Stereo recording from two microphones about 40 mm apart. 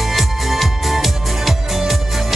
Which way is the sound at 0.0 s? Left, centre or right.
Centre.